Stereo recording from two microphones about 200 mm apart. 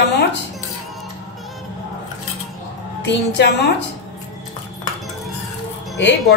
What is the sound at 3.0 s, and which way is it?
Speech, 60° left (ahead or behind).